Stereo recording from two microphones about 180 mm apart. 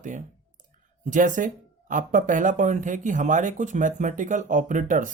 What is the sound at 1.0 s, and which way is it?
Speech, 45° right (ahead or behind).